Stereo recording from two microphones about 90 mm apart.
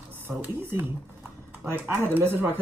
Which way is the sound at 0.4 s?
20° right (ahead or behind).